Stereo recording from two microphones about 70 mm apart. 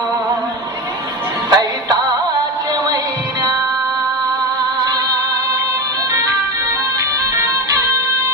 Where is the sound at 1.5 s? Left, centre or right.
Right.